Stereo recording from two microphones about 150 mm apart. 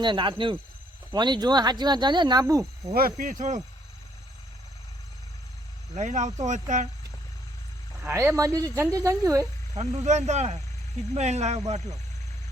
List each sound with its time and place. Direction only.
0.0 s speech: 30° right (ahead or behind)
2.9 s speech: 75° right (ahead or behind); by 3.6 s 60° right (ahead or behind)
5.9 s speech: 55° right (ahead or behind)
8.0 s speech: 15° right (ahead or behind)
9.7 s speech: 45° right (ahead or behind)